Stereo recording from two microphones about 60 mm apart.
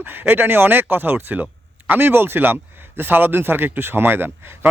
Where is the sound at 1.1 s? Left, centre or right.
Right.